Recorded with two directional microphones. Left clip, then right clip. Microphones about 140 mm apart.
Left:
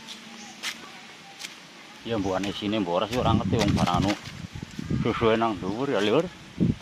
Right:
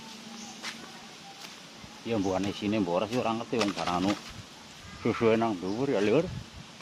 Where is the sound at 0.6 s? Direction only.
90° left.